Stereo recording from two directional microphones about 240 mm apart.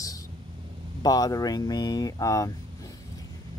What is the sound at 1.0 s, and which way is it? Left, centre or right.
Speech, centre.